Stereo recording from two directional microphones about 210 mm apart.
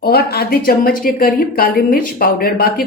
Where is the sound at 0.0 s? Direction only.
45° left (ahead or behind).